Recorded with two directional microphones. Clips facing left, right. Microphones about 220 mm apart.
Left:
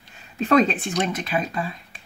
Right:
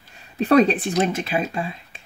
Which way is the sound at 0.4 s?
35° right (ahead or behind).